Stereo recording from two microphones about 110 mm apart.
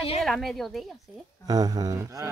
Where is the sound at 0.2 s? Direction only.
Centre (ahead or behind).